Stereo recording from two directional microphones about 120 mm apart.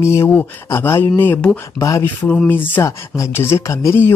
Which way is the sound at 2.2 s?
15° left (ahead or behind).